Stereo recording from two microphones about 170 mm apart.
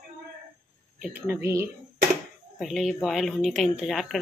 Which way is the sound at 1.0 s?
10° right (ahead or behind).